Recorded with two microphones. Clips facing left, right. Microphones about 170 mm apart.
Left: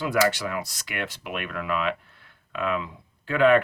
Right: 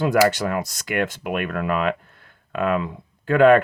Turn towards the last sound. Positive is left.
turn(degrees=-45)  # may be behind; listen again after turning